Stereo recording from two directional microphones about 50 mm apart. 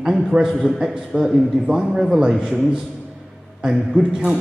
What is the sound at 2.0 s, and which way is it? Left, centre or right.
Speech, centre.